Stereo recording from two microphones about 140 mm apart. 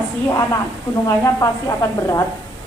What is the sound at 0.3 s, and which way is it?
A woman's voice, 25° left (ahead or behind).